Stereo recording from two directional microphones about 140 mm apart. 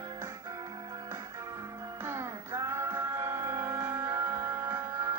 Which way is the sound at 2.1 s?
20° right (ahead or behind).